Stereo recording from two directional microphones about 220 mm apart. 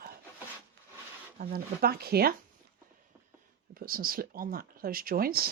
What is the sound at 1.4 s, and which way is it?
Speech, 45° right (ahead or behind).